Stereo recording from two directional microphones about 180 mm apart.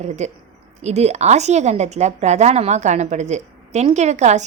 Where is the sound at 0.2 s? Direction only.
40° right (ahead or behind).